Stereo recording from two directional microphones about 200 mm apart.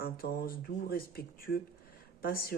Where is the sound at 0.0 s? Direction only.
50° left (ahead or behind).